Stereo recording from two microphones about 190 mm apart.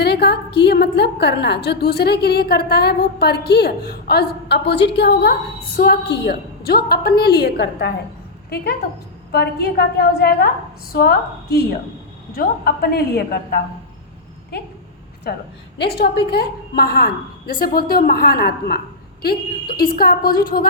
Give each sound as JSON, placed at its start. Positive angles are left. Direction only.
{"t": 0.0, "sound": "a sound", "side_deg": 60}
{"t": 0.6, "sound": "a woman's voice", "side_deg": 60}
{"t": 9.3, "sound": "a woman's voice", "side_deg": 55}
{"t": 15.3, "sound": "a woman's voice", "side_deg": 55}